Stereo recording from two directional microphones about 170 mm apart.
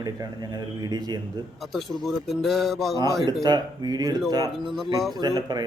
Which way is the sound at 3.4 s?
25° right (ahead or behind).